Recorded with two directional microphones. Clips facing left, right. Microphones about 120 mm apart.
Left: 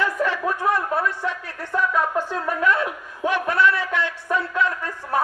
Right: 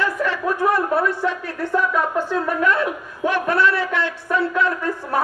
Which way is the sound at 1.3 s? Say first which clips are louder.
Right 5 dB; 15° right (ahead or behind).